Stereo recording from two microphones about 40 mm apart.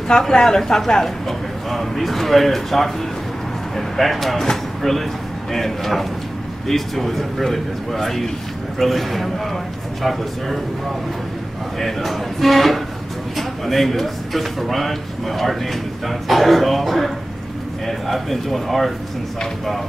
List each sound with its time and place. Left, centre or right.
0.3 s speech: centre
11.8 s speech: centre